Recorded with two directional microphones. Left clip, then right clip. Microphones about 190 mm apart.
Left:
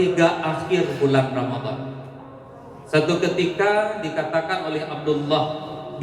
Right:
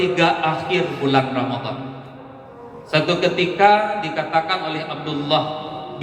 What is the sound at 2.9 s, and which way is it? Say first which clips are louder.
Speech: right 2 dB; 35° right (ahead or behind).